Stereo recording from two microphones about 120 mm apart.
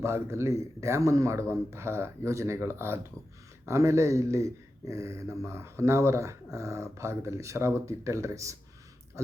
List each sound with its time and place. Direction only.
0.0 s speech: 25° right (ahead or behind)